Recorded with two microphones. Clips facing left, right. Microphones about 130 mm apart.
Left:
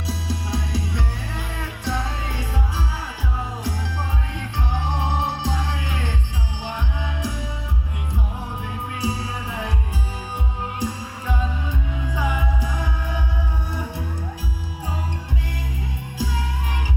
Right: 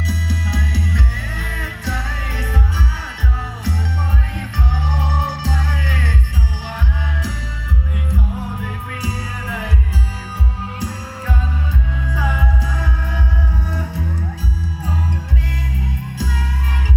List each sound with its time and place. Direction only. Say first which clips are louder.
0.1 s music: even; 25° left (ahead or behind)
4.4 s music: right 2 dB; 25° left (ahead or behind)
9.0 s music: left 2 dB; 25° left (ahead or behind)
10.8 s music: even; 20° left (ahead or behind)